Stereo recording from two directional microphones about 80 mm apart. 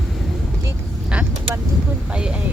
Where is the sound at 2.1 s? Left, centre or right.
Centre.